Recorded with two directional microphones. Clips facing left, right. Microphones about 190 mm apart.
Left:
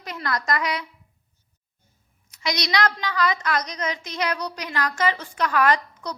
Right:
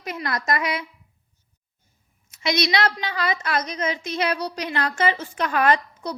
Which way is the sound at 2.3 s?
25° right (ahead or behind).